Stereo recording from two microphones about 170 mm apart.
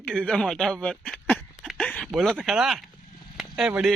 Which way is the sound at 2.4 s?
5° right (ahead or behind).